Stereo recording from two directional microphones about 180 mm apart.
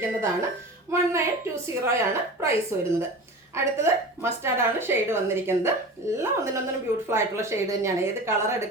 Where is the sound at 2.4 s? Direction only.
15° right (ahead or behind).